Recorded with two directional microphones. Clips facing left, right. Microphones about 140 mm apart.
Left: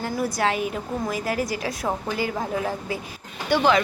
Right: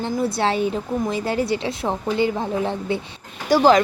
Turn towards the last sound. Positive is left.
turn(degrees=-40)  # may be behind; listen again after turning